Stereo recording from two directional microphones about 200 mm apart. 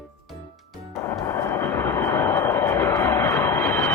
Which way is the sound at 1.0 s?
15° left (ahead or behind).